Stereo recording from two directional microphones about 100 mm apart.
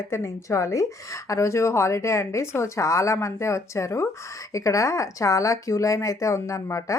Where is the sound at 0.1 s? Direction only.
30° left (ahead or behind).